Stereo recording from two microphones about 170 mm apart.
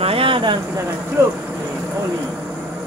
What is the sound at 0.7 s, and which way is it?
Speech, 15° right (ahead or behind).